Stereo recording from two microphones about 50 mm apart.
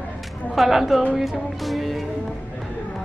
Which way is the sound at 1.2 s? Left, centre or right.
Centre.